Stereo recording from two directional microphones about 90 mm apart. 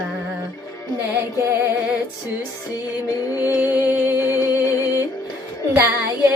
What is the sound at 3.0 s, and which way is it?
Music, 40° left (ahead or behind).